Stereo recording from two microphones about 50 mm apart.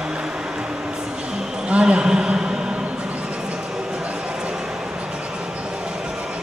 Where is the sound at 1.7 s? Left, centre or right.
Right.